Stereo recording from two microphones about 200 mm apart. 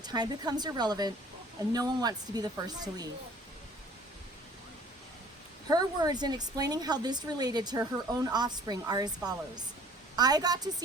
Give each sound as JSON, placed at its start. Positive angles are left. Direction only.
{"t": 0.0, "sound": "a woman's voice", "side_deg": -20}
{"t": 5.6, "sound": "a woman's voice", "side_deg": -20}